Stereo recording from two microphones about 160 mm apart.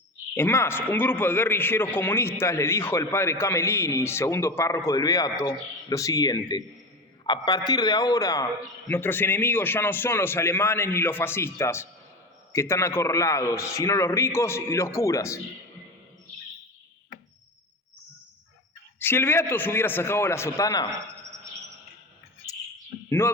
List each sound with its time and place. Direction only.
0.3 s a man's voice: 15° left (ahead or behind)
18.9 s a man's voice: 15° left (ahead or behind)
23.0 s speech: 15° left (ahead or behind)